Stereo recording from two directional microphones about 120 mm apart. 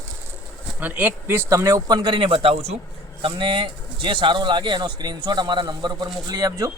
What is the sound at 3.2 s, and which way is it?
A man's voice, 45° right (ahead or behind).